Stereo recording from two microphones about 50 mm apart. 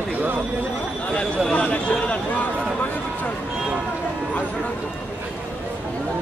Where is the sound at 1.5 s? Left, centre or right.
Left.